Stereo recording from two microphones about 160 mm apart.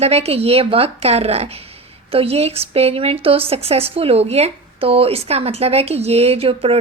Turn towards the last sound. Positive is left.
turn(degrees=-35)  # may be behind; listen again after turning